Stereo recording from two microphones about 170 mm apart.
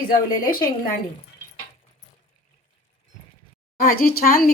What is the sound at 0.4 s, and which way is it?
Speech, 55° left (ahead or behind).